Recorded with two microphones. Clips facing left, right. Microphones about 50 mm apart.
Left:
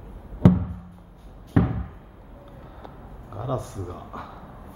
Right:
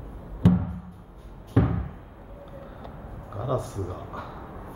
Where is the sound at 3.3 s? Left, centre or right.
Centre.